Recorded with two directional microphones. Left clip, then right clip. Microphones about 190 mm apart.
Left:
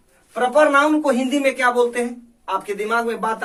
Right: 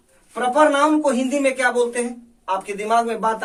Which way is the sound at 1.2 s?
15° right (ahead or behind).